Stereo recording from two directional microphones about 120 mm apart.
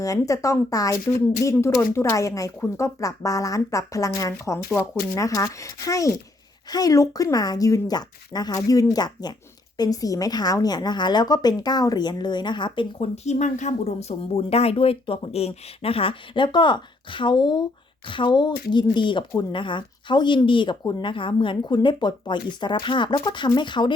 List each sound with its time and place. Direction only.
0.0 s speech: 30° left (ahead or behind); by 13.1 s 45° left (ahead or behind)
13.2 s speech: 80° left; by 23.9 s 40° left (ahead or behind)